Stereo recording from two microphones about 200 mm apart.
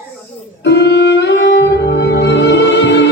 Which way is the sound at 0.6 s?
60° left (ahead or behind).